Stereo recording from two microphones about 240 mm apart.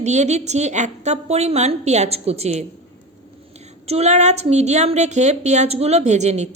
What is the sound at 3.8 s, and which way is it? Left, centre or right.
A woman's voice, right.